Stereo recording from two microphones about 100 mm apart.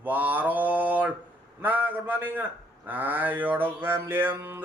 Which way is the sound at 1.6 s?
15° right (ahead or behind).